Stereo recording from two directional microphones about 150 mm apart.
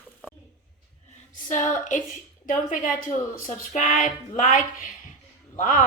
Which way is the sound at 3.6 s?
55° left (ahead or behind).